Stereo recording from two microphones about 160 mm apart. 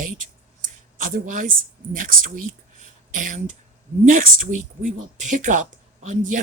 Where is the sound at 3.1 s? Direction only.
55° right (ahead or behind).